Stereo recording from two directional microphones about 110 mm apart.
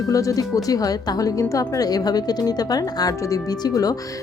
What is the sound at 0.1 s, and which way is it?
Speech, 30° left (ahead or behind).